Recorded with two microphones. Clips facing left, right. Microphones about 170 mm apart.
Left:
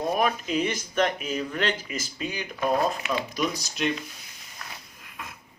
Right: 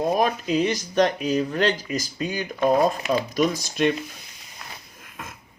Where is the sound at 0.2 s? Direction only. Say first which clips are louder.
Right 3 dB; 35° right (ahead or behind).